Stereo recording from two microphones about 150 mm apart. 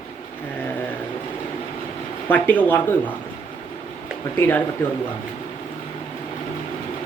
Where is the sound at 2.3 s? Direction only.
10° left (ahead or behind).